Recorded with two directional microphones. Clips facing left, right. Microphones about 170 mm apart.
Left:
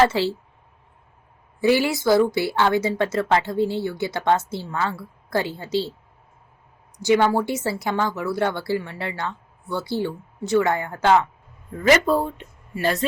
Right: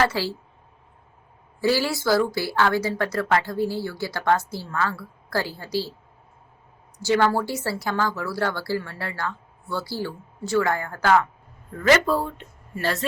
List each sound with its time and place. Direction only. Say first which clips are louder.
0.0 s speech: left 4 dB; 25° left (ahead or behind)
1.6 s speech: left 3 dB; 20° left (ahead or behind)
7.0 s speech: left 2 dB; 15° left (ahead or behind)